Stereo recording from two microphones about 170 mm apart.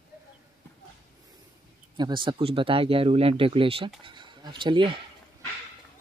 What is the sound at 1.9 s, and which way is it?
Speech, 25° right (ahead or behind).